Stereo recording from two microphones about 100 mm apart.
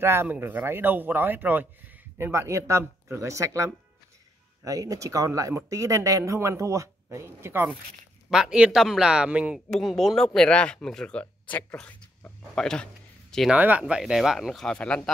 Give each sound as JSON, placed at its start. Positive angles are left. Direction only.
{"t": 0.0, "sound": "a man's voice", "side_deg": -25}
{"t": 8.3, "sound": "a man's voice", "side_deg": -5}
{"t": 9.7, "sound": "speech", "side_deg": 5}
{"t": 13.5, "sound": "speech", "side_deg": -15}